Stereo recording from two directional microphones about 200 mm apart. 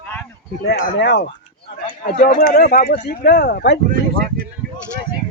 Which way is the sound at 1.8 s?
45° left (ahead or behind).